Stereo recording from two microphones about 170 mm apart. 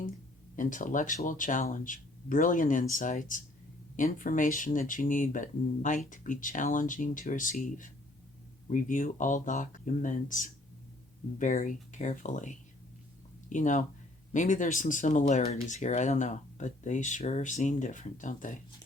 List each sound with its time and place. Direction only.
0.5 s speech: 50° left (ahead or behind)
8.7 s speech: 50° left (ahead or behind)